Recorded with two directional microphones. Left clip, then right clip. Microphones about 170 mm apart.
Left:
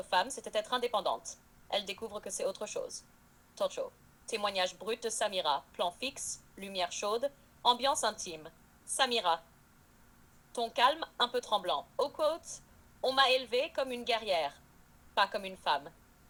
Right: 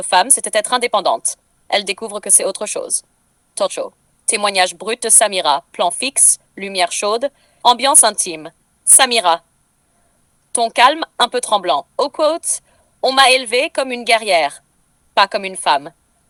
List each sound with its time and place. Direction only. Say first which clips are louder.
0.0 s a woman's voice: right 17 dB; 55° right (ahead or behind)
10.5 s a woman's voice: right 17 dB; 55° right (ahead or behind)